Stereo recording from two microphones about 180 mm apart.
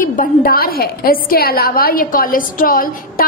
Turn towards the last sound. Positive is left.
turn(degrees=50)  # may be behind; listen again after turning